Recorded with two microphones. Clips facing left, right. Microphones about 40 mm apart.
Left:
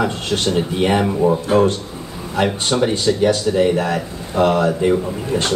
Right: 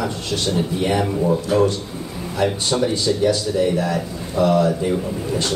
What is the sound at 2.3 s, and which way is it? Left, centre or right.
Speech, left.